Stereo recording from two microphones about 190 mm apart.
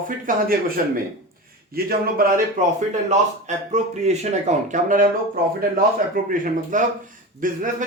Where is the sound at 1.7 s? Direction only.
50° right (ahead or behind).